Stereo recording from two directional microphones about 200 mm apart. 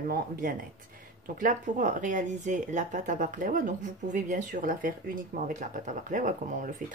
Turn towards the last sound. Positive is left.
turn(degrees=-40)  # may be behind; listen again after turning